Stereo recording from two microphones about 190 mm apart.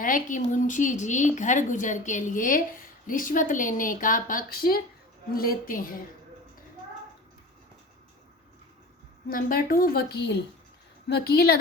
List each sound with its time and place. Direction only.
0.0 s a woman's voice: 45° left (ahead or behind)
9.3 s a woman's voice: 50° left (ahead or behind)